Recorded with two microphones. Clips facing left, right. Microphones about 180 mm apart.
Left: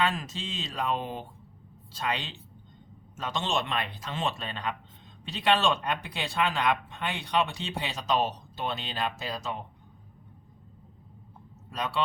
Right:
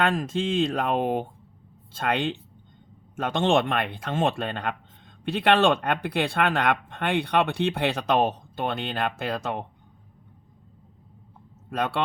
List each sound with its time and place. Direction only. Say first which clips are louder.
0.0 s speech: right 6 dB; 50° right (ahead or behind)
11.7 s speech: right 4 dB; 55° right (ahead or behind)